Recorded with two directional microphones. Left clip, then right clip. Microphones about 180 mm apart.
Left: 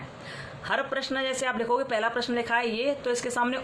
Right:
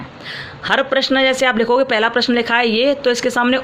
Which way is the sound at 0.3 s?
45° right (ahead or behind).